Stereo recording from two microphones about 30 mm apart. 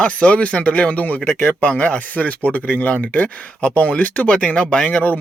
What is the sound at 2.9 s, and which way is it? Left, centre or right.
Speech, left.